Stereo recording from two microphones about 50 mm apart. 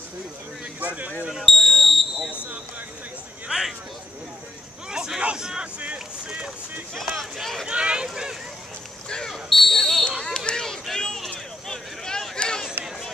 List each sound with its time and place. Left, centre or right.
0.7 s speech: right
1.4 s speech: centre
3.4 s speech: centre
4.9 s hubbub: centre
5.2 s speech: centre
5.8 s vehicle: right
7.6 s speech: right
8.1 s a sound: centre
10.2 s a sound: centre